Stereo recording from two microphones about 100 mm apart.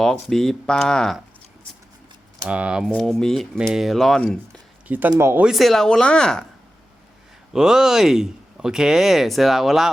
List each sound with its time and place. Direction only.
0.0 s speech: 5° left (ahead or behind)
2.5 s speech: 10° right (ahead or behind)
2.9 s speech: 5° left (ahead or behind)
4.9 s speech: 20° right (ahead or behind)
5.4 s speech: centre (ahead or behind)
7.5 s speech: 5° right (ahead or behind)